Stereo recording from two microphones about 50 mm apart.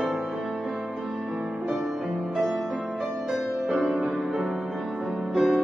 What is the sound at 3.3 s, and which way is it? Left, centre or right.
Music, centre.